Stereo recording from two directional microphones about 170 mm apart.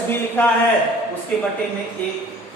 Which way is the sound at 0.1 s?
10° left (ahead or behind).